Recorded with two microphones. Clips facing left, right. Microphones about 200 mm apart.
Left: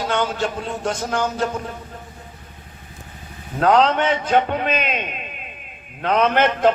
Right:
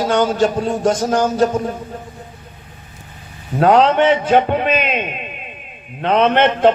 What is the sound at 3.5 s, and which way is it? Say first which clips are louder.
A man's voice: right 4 dB; 15° right (ahead or behind).